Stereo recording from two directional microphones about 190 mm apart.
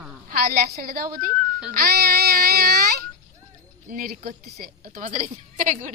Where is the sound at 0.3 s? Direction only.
50° right (ahead or behind).